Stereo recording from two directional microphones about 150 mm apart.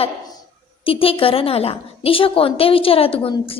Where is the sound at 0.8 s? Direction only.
40° left (ahead or behind).